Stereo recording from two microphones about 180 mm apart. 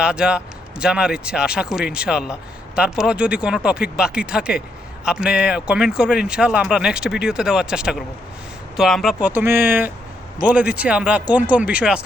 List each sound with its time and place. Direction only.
0.0 s speech: 5° right (ahead or behind)